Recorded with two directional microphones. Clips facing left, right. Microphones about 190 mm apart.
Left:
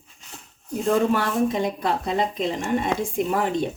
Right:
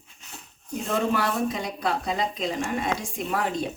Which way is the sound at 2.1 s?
55° left (ahead or behind).